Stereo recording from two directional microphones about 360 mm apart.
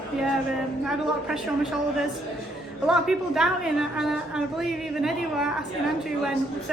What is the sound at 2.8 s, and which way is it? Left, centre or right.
A woman's voice, centre.